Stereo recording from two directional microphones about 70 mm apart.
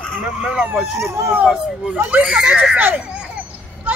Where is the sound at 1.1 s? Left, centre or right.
Right.